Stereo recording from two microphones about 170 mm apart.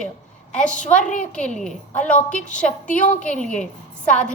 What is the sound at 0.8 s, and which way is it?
Speech, 50° left (ahead or behind).